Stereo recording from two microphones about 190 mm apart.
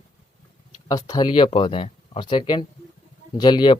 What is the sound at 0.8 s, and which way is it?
Speech, 20° left (ahead or behind).